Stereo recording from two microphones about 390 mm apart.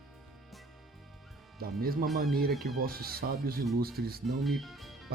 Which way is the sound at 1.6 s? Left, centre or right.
Right.